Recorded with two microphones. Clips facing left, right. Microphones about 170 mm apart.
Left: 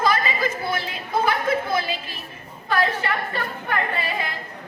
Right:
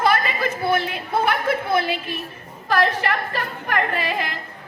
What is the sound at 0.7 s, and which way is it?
A woman's voice, 60° right (ahead or behind).